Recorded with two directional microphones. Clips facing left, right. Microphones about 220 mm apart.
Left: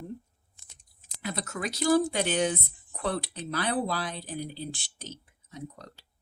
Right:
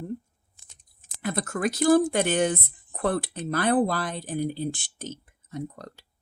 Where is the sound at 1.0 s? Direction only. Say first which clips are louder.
Right 6 dB; 50° right (ahead or behind).